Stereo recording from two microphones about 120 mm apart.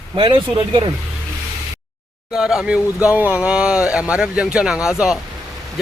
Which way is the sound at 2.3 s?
5° right (ahead or behind).